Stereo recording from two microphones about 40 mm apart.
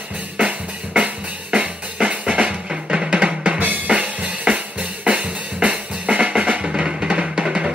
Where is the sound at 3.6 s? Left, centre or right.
Right.